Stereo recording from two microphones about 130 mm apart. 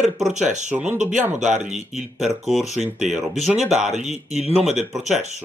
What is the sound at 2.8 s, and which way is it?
Speech, 65° right (ahead or behind).